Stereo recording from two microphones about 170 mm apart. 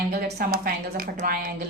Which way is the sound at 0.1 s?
65° right (ahead or behind).